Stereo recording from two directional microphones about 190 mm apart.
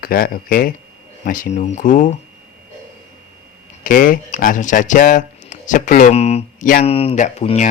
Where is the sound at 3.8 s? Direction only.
45° left (ahead or behind).